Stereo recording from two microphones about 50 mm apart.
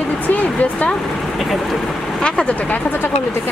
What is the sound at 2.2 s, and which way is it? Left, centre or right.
Speech, left.